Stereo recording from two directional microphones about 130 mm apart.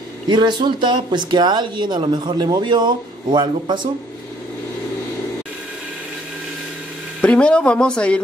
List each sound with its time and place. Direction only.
0.3 s speech: 35° right (ahead or behind)
7.2 s speech: 10° left (ahead or behind)